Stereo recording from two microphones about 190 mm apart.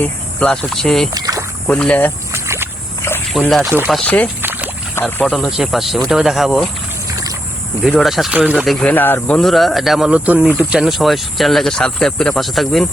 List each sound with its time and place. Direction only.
0.0 s speech: 5° left (ahead or behind)
1.1 s rowboat: 20° right (ahead or behind)
1.6 s speech: 5° left (ahead or behind)
2.3 s a sound: 15° right (ahead or behind)
3.3 s speech: centre (ahead or behind)
4.0 s speech: 10° left (ahead or behind)
7.9 s speech: centre (ahead or behind)